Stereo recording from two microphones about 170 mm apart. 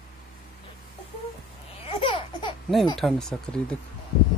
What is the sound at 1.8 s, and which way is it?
Laughter, 35° left (ahead or behind).